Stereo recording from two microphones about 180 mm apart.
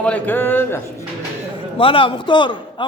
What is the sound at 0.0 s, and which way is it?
Snicker, 10° left (ahead or behind).